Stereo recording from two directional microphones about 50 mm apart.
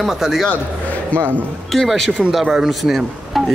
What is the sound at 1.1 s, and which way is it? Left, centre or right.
Speech, left.